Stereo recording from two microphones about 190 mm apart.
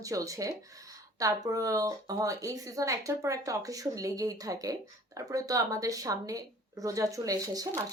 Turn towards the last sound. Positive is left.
turn(degrees=-15)  # may be behind; listen again after turning